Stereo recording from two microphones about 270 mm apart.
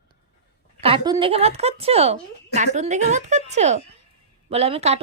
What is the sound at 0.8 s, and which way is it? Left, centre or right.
A woman's voice, centre.